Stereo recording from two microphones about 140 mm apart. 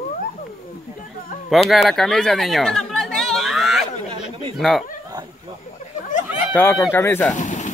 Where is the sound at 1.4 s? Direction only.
Centre (ahead or behind).